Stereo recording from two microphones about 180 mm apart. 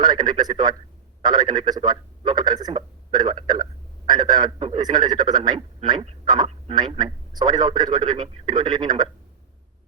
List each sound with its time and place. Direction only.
0.0 s a man's voice: 20° right (ahead or behind)